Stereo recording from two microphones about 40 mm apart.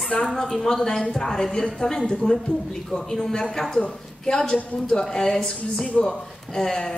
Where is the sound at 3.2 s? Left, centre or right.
Centre.